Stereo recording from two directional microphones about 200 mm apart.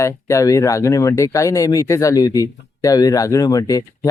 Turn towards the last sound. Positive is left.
turn(degrees=15)  # may be behind; listen again after turning